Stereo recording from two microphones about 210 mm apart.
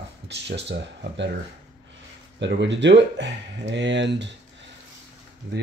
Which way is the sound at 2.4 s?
60° right (ahead or behind).